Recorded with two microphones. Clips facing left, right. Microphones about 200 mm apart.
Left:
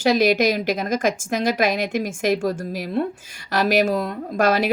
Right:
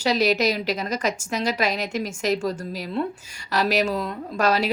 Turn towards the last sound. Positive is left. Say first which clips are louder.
# left 3 dB
turn(degrees=50)  # may be behind; listen again after turning